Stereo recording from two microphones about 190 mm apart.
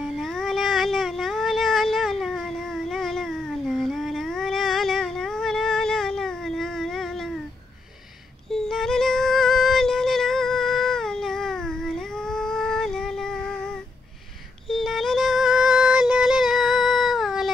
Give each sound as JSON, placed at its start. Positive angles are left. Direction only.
{"t": 0.0, "sound": "a sound", "side_deg": 0}
{"t": 8.5, "sound": "music", "side_deg": 0}
{"t": 14.7, "sound": "music", "side_deg": 0}